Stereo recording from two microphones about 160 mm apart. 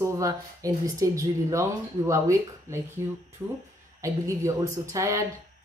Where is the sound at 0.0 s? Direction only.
20° right (ahead or behind).